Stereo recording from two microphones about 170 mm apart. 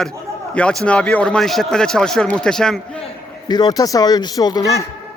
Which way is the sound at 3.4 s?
25° left (ahead or behind).